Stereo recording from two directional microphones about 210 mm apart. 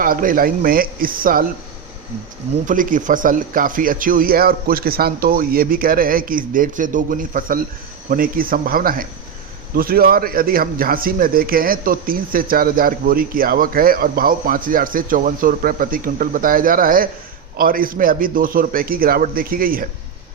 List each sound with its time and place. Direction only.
0.0 s a man's voice: 40° right (ahead or behind)
2.6 s a man's voice: 40° right (ahead or behind)